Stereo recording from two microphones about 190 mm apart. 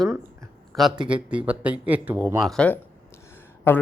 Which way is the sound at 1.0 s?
5° right (ahead or behind).